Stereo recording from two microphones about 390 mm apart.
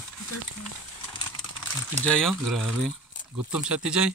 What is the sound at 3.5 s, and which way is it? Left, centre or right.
Speech, centre.